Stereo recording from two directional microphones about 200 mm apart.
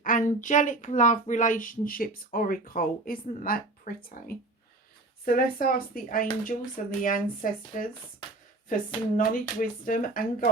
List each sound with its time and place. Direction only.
0.0 s a woman's voice: 40° left (ahead or behind)